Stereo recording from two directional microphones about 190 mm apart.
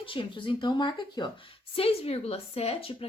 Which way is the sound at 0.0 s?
25° left (ahead or behind).